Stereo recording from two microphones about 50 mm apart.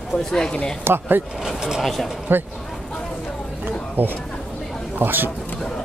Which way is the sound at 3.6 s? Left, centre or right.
Right.